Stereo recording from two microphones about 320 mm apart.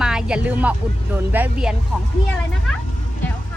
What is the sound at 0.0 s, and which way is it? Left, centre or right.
Music, centre.